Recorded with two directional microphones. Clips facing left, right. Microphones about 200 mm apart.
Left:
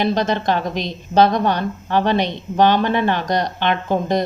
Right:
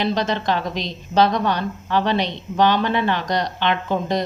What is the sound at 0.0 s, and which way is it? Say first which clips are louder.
A woman's voice: left 3 dB; 50° left (ahead or behind).